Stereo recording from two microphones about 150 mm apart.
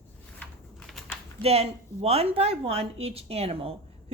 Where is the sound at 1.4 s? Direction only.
40° right (ahead or behind).